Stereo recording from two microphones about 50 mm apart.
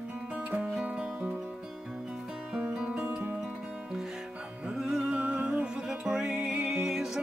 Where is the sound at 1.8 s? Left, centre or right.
Centre.